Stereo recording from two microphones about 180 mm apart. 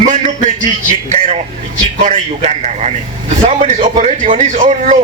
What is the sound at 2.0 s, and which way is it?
A man's voice, 40° right (ahead or behind).